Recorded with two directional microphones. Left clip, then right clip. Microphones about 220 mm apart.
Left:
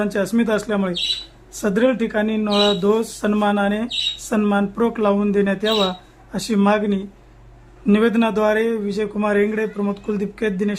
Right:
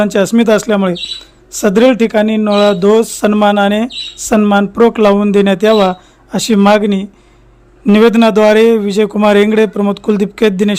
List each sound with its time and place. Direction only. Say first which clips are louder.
0.0 s a man's voice: right 10 dB; 30° right (ahead or behind)